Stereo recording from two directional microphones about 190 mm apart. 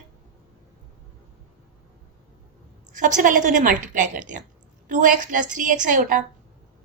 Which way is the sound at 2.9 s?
45° right (ahead or behind).